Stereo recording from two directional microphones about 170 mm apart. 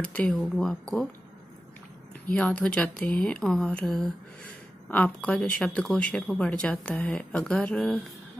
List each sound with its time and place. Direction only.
0.0 s speech: 5° left (ahead or behind)
2.2 s speech: 10° left (ahead or behind)